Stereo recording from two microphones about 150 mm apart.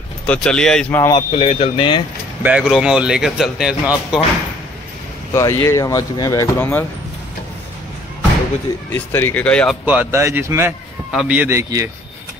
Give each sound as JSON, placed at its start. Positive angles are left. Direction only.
{"t": 0.3, "sound": "speech", "side_deg": 5}
{"t": 0.9, "sound": "speech", "side_deg": 20}
{"t": 1.3, "sound": "speech", "side_deg": 45}
{"t": 2.4, "sound": "speech", "side_deg": -5}
{"t": 5.3, "sound": "speech", "side_deg": 20}
{"t": 8.9, "sound": "speech", "side_deg": 15}
{"t": 9.8, "sound": "a man's voice", "side_deg": -15}
{"t": 11.1, "sound": "a man's voice", "side_deg": -5}